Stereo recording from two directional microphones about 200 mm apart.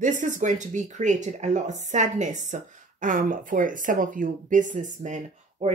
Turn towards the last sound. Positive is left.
turn(degrees=-35)  # may be behind; listen again after turning